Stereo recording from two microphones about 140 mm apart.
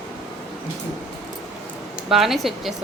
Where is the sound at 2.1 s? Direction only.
Centre (ahead or behind).